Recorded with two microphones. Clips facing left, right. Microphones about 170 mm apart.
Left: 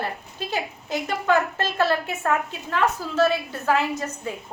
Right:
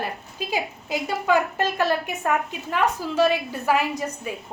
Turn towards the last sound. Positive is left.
turn(degrees=-10)  # may be behind; listen again after turning